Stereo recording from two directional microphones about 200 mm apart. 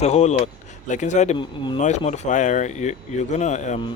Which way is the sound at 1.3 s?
25° left (ahead or behind).